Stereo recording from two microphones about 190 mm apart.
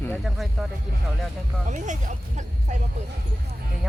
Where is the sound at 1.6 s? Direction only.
40° right (ahead or behind).